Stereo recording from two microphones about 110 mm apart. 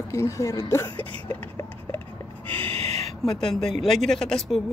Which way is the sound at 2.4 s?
55° right (ahead or behind).